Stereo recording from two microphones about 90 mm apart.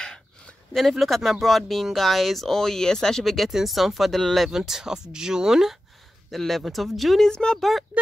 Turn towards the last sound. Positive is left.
turn(degrees=0)  # may be behind; listen again after turning